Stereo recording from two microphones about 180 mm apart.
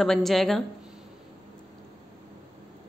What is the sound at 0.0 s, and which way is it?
Speech, centre (ahead or behind).